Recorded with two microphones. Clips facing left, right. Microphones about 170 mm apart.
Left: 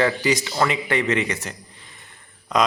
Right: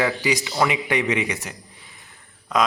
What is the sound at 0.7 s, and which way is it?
Speech, 15° right (ahead or behind).